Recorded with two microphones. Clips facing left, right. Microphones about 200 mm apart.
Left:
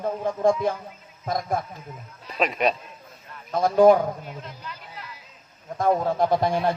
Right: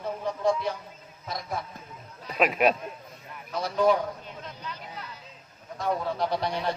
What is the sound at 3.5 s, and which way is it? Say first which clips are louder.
Speech: left 8 dB; 50° left (ahead or behind).